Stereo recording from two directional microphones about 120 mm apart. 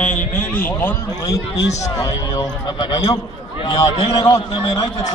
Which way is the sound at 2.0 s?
35° left (ahead or behind).